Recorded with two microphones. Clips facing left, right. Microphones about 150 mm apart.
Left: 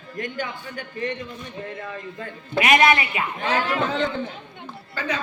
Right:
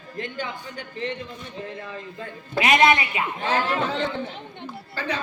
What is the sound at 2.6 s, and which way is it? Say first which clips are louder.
A man's voice: even; 25° right (ahead or behind).